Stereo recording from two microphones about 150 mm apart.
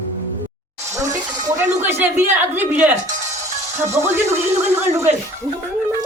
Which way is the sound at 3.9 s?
15° right (ahead or behind).